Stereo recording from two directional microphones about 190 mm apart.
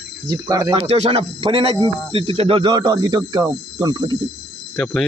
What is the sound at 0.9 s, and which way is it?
Speech, 30° right (ahead or behind).